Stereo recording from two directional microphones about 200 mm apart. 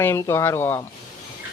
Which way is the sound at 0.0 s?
15° left (ahead or behind).